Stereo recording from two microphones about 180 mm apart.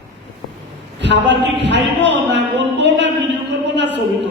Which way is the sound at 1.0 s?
75° right (ahead or behind).